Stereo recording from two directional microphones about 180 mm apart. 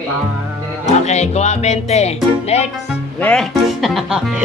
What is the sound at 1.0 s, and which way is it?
Speech, 35° left (ahead or behind).